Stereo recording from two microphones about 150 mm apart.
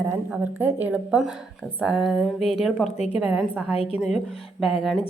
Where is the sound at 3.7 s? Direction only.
40° left (ahead or behind).